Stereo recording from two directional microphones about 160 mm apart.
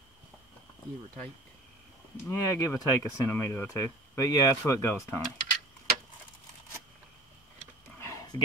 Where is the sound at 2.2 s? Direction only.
15° left (ahead or behind).